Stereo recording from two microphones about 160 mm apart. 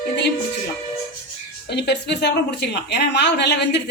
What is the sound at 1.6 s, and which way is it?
A woman's voice, 90° left.